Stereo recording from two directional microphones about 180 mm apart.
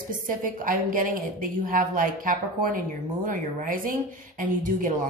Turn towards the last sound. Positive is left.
turn(degrees=-50)  # may be behind; listen again after turning